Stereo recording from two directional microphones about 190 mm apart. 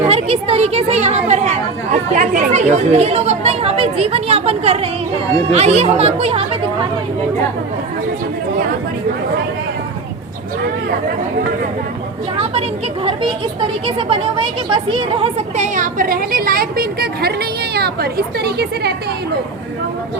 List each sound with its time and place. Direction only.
0.0 s speech: 30° right (ahead or behind)
13.1 s speech: 25° right (ahead or behind); by 18.9 s 60° right (ahead or behind)